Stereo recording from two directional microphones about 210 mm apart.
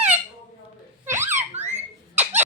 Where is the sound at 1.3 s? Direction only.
35° right (ahead or behind).